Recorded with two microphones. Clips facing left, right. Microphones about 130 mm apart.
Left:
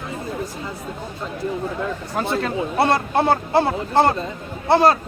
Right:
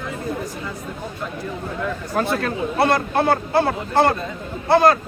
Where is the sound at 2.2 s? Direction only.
20° left (ahead or behind).